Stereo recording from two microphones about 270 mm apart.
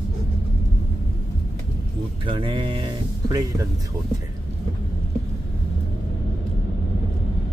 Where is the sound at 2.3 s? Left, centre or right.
Centre.